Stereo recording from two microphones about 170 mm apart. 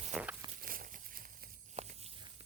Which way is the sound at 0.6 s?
55° right (ahead or behind).